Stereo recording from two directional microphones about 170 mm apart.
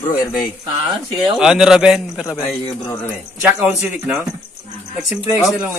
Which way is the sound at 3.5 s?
10° right (ahead or behind).